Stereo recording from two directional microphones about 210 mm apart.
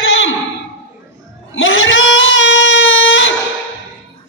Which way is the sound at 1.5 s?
65° left (ahead or behind).